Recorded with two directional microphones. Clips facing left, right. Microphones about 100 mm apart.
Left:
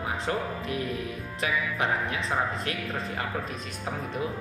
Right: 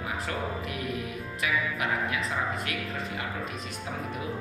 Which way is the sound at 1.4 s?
30° left (ahead or behind).